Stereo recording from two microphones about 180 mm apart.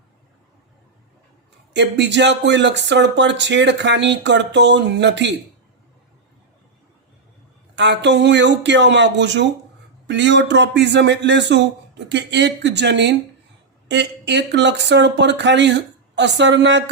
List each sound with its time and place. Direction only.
1.7 s speech: 75° right (ahead or behind)
7.8 s a man's voice: 75° right (ahead or behind)